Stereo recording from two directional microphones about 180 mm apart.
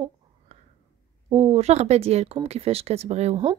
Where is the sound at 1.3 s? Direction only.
35° right (ahead or behind).